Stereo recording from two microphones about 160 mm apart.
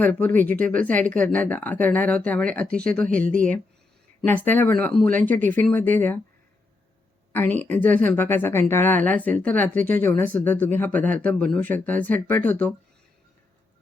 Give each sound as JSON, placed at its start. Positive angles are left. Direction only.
{"t": 0.0, "sound": "speech", "side_deg": 10}
{"t": 4.4, "sound": "speech", "side_deg": 10}
{"t": 7.3, "sound": "speech", "side_deg": 10}